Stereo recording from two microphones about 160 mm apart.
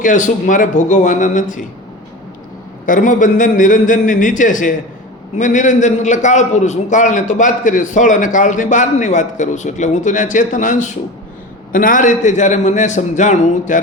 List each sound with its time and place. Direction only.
0.0 s a man's voice: 50° left (ahead or behind)
2.8 s a man's voice: 55° left (ahead or behind)